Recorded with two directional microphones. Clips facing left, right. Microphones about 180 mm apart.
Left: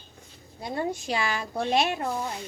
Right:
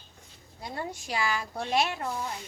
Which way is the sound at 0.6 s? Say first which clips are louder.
Left 7 dB; 20° left (ahead or behind).